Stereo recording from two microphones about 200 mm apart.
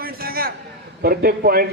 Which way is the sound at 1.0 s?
50° right (ahead or behind).